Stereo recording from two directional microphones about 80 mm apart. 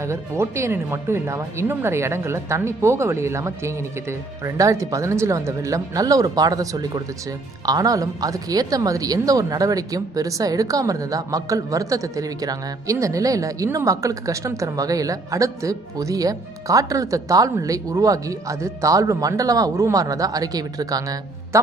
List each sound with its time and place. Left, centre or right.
0.0 s speech: right